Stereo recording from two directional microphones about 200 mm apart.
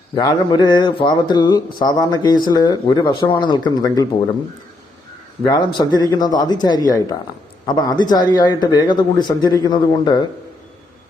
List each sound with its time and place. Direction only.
0.2 s speech: 20° left (ahead or behind)
5.5 s speech: 20° left (ahead or behind)